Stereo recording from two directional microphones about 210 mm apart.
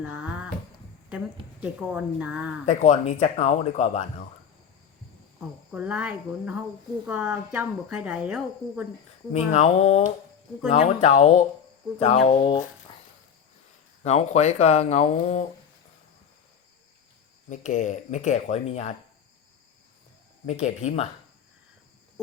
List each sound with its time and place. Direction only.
0.0 s a sound: 5° right (ahead or behind)
1.6 s speech: 5° right (ahead or behind)
2.6 s speech: 30° left (ahead or behind)
5.7 s speech: 5° right (ahead or behind)
9.3 s speech: 30° left (ahead or behind)
14.0 s speech: 30° left (ahead or behind)
17.5 s speech: 35° left (ahead or behind)
20.5 s speech: 30° left (ahead or behind)